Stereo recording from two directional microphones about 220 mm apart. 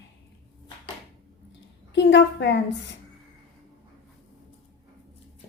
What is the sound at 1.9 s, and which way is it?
Speech, 55° left (ahead or behind).